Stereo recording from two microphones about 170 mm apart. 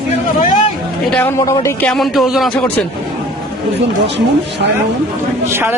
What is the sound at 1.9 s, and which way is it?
Speech, centre (ahead or behind).